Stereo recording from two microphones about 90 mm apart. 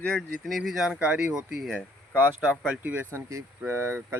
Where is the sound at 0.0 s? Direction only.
5° left (ahead or behind).